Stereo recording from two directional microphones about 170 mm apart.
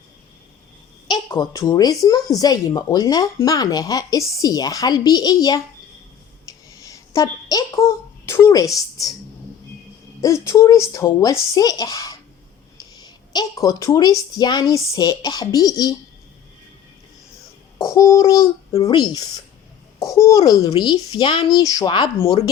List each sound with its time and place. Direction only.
1.3 s a child's voice: 20° left (ahead or behind)
6.7 s a sound: 20° left (ahead or behind)
10.2 s a child's voice: 15° left (ahead or behind)
17.7 s a child's voice: 15° left (ahead or behind)